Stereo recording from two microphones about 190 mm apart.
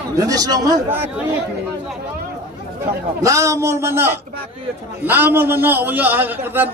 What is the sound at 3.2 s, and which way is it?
A man's voice, 15° right (ahead or behind).